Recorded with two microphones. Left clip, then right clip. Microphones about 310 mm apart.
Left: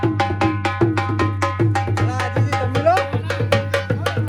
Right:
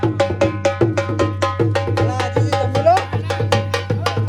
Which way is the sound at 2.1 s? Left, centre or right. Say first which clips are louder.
Right 3 dB; right.